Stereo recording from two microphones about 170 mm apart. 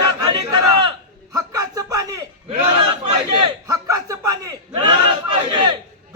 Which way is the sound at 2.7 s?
25° right (ahead or behind).